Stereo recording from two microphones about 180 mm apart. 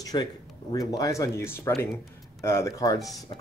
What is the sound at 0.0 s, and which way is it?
Speech, 20° left (ahead or behind).